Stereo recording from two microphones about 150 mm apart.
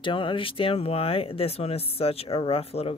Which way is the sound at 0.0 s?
35° left (ahead or behind).